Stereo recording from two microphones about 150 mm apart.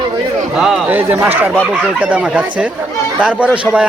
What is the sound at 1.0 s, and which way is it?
Speech, 15° right (ahead or behind).